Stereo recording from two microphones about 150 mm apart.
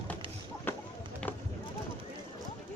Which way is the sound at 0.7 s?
15° left (ahead or behind).